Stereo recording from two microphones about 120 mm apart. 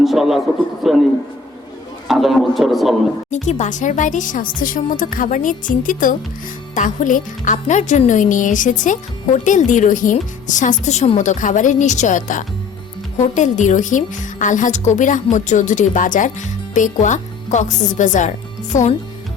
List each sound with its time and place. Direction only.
0.0 s a man's voice: centre (ahead or behind)
2.0 s a man's voice: centre (ahead or behind)
3.2 s a woman's voice: 80° left
11.2 s a woman's voice: 90° left